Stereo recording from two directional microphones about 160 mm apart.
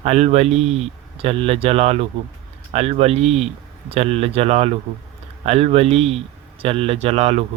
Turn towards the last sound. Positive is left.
turn(degrees=-45)  # may be behind; listen again after turning